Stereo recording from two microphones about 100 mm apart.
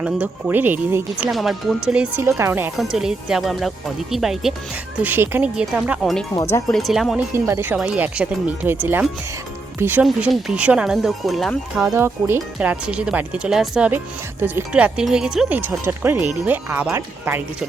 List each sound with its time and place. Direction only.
0.0 s speech: 10° right (ahead or behind)
1.3 s speech: centre (ahead or behind)
1.9 s speech: 10° right (ahead or behind)
2.2 s speech: 25° right (ahead or behind)
2.7 s speech: 5° right (ahead or behind)
5.0 s speech: 20° right (ahead or behind)
5.5 s speech: 10° right (ahead or behind)
6.0 s speech: centre (ahead or behind)
7.3 s speech: 25° right (ahead or behind)
10.0 s speech: 10° right (ahead or behind)
11.9 s speech: 25° right (ahead or behind)
12.5 s speech: 10° right (ahead or behind)
15.5 s speech: 20° right (ahead or behind)